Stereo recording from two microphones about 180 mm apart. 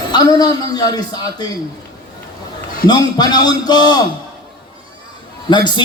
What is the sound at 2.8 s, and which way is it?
A man's voice, 20° left (ahead or behind).